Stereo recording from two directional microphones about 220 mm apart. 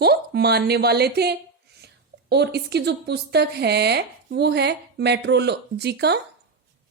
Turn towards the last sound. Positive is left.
turn(degrees=-50)  # may be behind; listen again after turning